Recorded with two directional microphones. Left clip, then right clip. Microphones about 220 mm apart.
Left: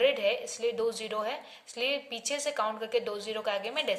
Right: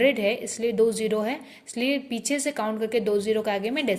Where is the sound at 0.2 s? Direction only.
30° right (ahead or behind).